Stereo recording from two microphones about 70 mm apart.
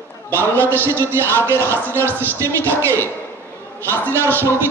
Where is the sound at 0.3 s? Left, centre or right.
Right.